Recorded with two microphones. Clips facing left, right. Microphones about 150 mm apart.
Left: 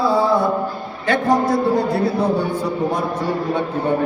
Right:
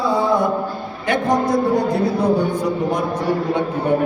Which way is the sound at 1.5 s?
15° right (ahead or behind).